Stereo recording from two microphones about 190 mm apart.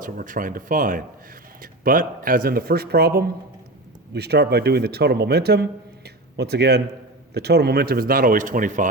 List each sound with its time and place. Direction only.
0.0 s speech: 45° right (ahead or behind)